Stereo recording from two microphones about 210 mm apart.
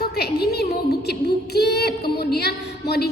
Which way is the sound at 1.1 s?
50° left (ahead or behind).